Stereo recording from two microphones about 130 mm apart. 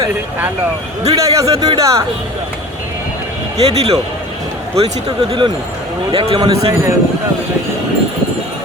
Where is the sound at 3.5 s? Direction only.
55° right (ahead or behind).